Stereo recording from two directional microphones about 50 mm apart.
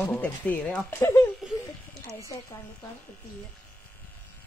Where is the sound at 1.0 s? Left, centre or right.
Left.